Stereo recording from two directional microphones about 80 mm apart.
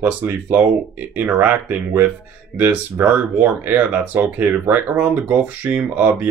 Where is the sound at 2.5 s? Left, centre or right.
Right.